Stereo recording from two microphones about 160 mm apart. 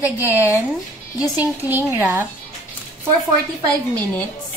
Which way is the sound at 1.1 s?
20° left (ahead or behind).